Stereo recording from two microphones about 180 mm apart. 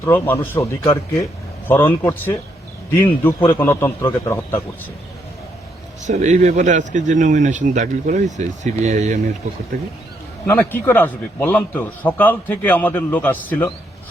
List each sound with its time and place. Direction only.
0.0 s a man's voice: 10° left (ahead or behind)
6.1 s speech: 40° right (ahead or behind)
10.4 s a man's voice: 10° left (ahead or behind)